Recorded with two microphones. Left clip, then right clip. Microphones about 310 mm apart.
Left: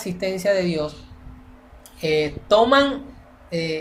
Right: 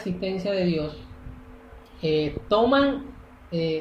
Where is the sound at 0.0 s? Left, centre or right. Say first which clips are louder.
Left 6 dB; left.